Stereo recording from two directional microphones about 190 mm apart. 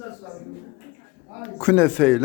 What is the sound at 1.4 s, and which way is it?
Speech, 10° left (ahead or behind).